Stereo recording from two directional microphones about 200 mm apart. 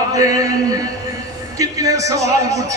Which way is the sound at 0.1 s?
15° right (ahead or behind).